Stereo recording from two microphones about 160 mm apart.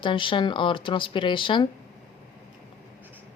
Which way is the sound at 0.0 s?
30° left (ahead or behind).